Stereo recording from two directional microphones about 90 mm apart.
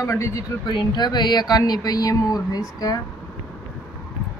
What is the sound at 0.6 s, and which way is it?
Speech, 55° left (ahead or behind).